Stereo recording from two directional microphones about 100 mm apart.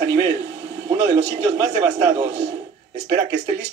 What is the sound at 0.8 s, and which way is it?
A man's voice, 40° right (ahead or behind).